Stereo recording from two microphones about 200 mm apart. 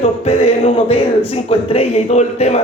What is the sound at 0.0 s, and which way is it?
A man's voice, 30° left (ahead or behind).